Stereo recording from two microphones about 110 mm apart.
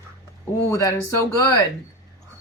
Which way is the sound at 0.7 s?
30° left (ahead or behind).